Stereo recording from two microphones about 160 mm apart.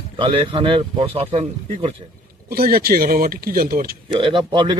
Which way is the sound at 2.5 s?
65° right (ahead or behind).